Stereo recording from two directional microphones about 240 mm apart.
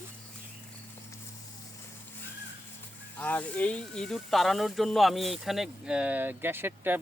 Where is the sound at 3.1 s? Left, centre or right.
Centre.